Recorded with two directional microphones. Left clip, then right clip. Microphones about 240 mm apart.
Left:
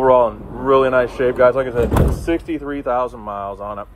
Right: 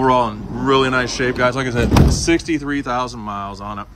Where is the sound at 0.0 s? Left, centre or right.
Centre.